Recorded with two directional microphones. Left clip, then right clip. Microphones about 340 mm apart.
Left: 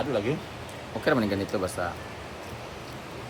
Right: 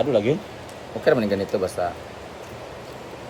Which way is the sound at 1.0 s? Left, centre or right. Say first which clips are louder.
Right 6 dB; centre.